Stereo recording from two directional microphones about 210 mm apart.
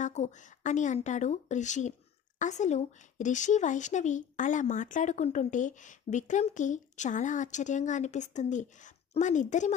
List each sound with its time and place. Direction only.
0.0 s speech: 35° left (ahead or behind)